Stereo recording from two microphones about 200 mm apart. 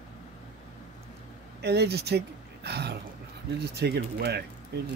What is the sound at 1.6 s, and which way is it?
Speech, 55° right (ahead or behind).